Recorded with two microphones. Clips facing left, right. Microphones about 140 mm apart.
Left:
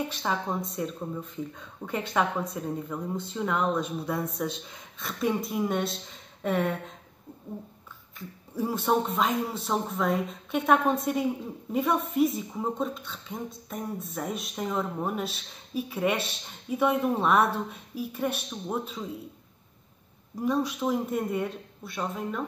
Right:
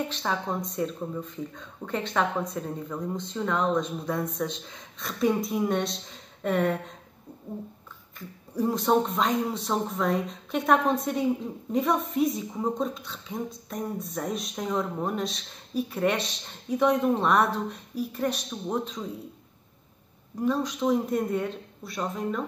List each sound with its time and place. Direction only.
0.1 s a woman's voice: 5° left (ahead or behind)
8.5 s a woman's voice: 5° left (ahead or behind)
20.3 s a woman's voice: 10° left (ahead or behind)